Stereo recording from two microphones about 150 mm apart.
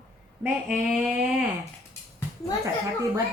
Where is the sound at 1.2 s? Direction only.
Centre (ahead or behind).